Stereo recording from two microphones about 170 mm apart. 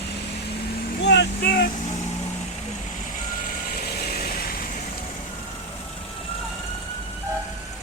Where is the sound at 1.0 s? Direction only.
80° left; by 1.7 s 65° left (ahead or behind).